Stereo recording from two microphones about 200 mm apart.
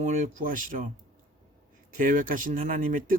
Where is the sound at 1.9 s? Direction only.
40° right (ahead or behind).